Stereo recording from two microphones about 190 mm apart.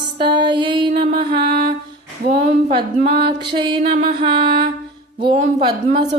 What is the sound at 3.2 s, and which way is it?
Music, 25° right (ahead or behind).